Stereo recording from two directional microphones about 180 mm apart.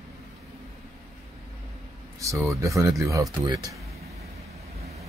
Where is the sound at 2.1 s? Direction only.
15° right (ahead or behind).